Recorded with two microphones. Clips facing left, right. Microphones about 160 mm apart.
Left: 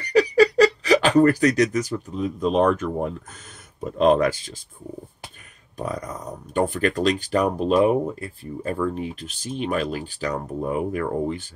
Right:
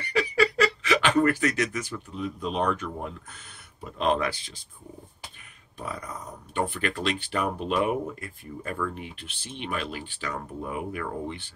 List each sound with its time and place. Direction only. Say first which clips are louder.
0.0 s speech: left 8 dB; 40° left (ahead or behind)
5.8 s speech: left 7 dB; 45° left (ahead or behind)